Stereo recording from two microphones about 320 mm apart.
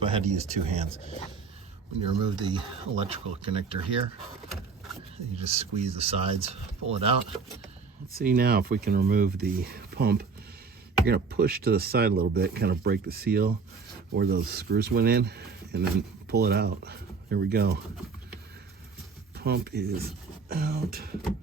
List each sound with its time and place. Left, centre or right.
0.0 s speech: centre
2.2 s speech: centre
5.4 s speech: centre
19.4 s speech: right